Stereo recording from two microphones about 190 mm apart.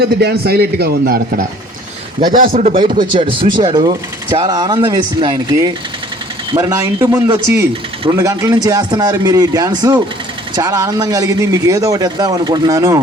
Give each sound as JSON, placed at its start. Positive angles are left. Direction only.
{"t": 0.0, "sound": "a man's voice", "side_deg": -60}
{"t": 3.0, "sound": "speech", "side_deg": -25}